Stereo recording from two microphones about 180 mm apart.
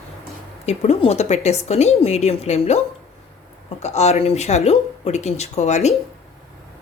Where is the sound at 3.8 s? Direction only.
35° left (ahead or behind).